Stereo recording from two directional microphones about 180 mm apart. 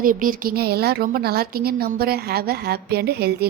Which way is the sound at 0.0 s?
50° right (ahead or behind).